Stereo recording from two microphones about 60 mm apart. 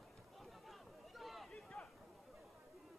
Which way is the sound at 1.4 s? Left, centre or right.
Centre.